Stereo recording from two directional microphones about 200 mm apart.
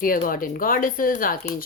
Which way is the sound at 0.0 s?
45° left (ahead or behind).